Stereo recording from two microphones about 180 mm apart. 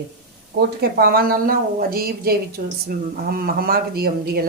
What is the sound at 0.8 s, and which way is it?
Speech, 60° right (ahead or behind).